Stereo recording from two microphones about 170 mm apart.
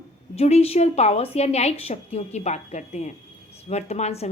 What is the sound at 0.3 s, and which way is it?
A woman's voice, 35° left (ahead or behind).